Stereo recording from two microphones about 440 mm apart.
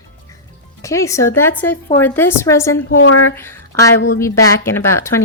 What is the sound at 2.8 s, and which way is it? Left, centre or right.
Speech, left.